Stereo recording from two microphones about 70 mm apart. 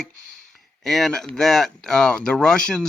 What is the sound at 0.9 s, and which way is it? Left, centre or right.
Speech, centre.